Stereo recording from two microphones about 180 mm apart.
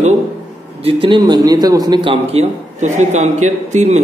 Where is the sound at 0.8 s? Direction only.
30° right (ahead or behind).